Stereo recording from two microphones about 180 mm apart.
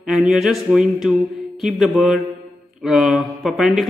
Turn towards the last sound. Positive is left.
turn(degrees=0)  # may be behind; listen again after turning